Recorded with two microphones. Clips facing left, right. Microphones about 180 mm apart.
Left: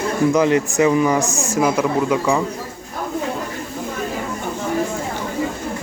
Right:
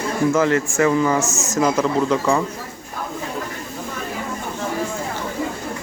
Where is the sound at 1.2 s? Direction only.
35° left (ahead or behind).